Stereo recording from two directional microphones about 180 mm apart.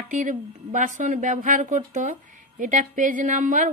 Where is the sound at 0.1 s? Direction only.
45° right (ahead or behind).